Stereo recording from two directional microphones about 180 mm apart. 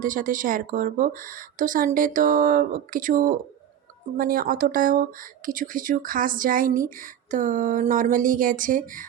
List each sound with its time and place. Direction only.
0.0 s speech: 50° right (ahead or behind)